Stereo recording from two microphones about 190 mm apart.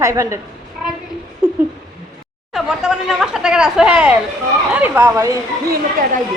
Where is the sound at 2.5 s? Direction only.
Centre (ahead or behind).